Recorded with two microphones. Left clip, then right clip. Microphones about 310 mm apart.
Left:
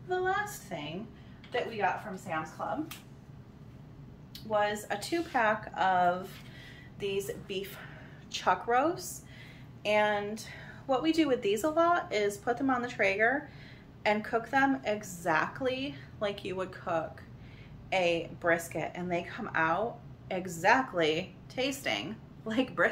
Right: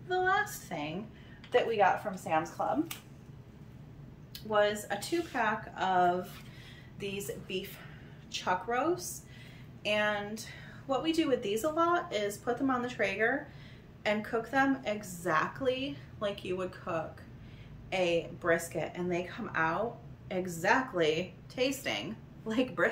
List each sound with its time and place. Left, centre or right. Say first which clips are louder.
0.1 s a sound: right 2 dB; centre
2.6 s speech: right 3 dB; right
4.3 s a woman's voice: right 1 dB; centre